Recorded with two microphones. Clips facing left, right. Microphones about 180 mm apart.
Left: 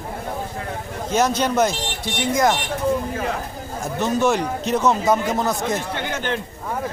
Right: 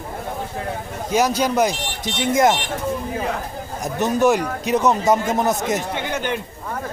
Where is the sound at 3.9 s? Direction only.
15° right (ahead or behind).